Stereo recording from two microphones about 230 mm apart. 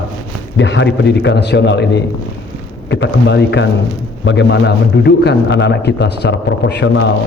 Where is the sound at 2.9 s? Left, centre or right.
Left.